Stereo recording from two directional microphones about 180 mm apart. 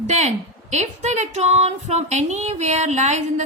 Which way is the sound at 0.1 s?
40° right (ahead or behind).